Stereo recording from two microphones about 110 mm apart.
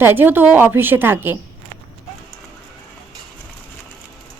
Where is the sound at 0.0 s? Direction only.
20° right (ahead or behind).